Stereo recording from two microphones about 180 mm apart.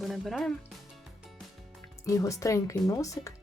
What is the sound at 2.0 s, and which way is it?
Speech, 20° left (ahead or behind).